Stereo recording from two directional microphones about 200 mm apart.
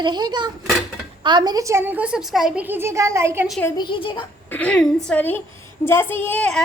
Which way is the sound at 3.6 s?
20° left (ahead or behind).